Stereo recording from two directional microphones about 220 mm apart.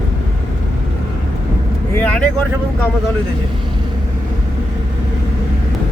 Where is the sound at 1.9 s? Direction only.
5° left (ahead or behind).